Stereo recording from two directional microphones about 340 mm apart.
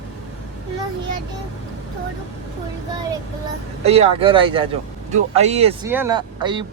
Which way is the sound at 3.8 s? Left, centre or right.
Centre.